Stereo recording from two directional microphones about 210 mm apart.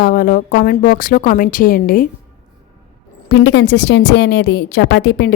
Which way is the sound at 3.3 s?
60° left (ahead or behind).